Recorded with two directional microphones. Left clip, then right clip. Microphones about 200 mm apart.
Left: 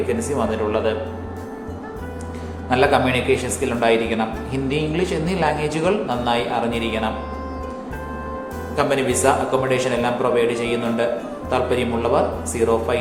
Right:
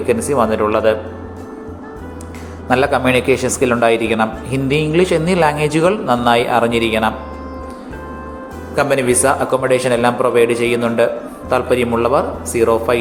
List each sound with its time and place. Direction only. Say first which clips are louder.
0.1 s speech: right 7 dB; 30° right (ahead or behind)
2.6 s speech: right 3 dB; 30° right (ahead or behind)
8.7 s speech: right 5 dB; 30° right (ahead or behind)